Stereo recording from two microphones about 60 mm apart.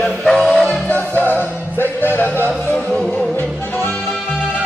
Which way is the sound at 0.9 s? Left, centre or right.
Left.